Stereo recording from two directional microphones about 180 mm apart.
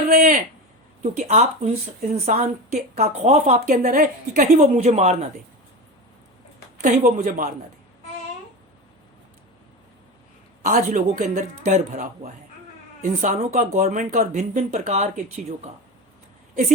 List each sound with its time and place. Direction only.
0.1 s a man's voice: 45° right (ahead or behind)
6.8 s speech: 45° right (ahead or behind)
10.6 s speech: 50° right (ahead or behind)